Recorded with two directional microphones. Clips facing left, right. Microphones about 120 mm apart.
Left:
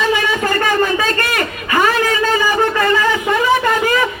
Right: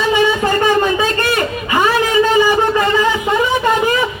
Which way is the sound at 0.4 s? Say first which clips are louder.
Right 2 dB; 20° right (ahead or behind).